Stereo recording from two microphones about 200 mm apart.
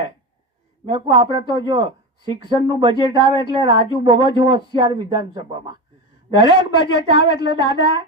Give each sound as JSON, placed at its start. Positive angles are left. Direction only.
{"t": 0.9, "sound": "a woman's voice", "side_deg": -20}